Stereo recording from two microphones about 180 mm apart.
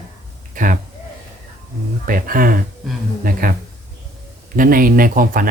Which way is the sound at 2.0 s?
50° right (ahead or behind).